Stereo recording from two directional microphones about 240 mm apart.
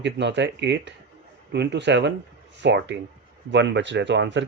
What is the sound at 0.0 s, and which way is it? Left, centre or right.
Speech, right.